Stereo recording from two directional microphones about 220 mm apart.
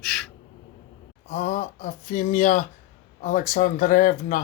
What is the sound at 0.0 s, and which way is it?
Gasp, centre (ahead or behind).